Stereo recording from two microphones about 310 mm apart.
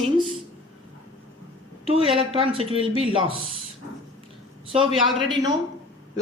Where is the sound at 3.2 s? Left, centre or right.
Centre.